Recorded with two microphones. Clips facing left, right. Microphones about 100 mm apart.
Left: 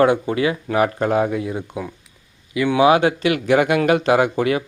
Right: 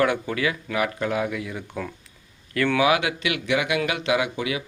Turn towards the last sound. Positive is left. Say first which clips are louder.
# left 7 dB
turn(degrees=45)  # may be behind; listen again after turning